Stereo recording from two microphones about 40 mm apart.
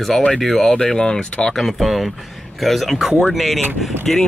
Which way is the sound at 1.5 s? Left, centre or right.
Centre.